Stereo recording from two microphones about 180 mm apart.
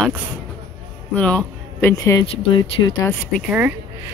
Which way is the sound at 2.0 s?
20° left (ahead or behind).